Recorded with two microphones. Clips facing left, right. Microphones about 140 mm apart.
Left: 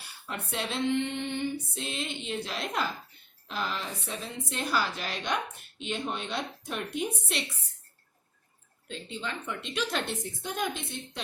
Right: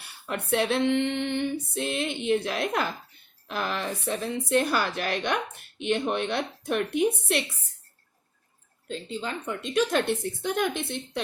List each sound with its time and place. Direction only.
0.3 s female singing: 60° right (ahead or behind)
8.9 s a woman's voice: 40° right (ahead or behind)
10.4 s female singing: 65° right (ahead or behind)